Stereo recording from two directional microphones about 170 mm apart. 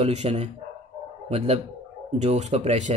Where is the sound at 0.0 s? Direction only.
40° right (ahead or behind).